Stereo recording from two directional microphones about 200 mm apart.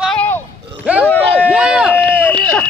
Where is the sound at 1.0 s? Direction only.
5° left (ahead or behind).